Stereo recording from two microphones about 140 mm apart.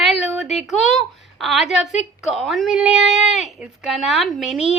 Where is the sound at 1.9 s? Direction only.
55° left (ahead or behind).